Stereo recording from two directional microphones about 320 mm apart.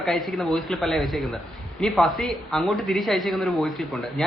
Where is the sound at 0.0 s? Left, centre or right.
Centre.